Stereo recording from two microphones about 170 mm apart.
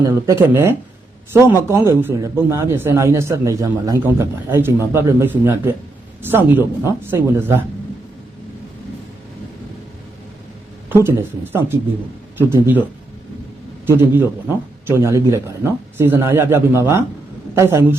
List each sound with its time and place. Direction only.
0.0 s a man's voice: 15° right (ahead or behind)
10.8 s a man's voice: 15° right (ahead or behind)
13.8 s a man's voice: 15° right (ahead or behind)